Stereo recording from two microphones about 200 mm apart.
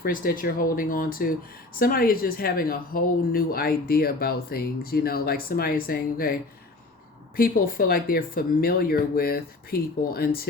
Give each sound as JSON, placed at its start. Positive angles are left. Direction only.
{"t": 0.0, "sound": "speech", "side_deg": 45}
{"t": 7.3, "sound": "speech", "side_deg": 45}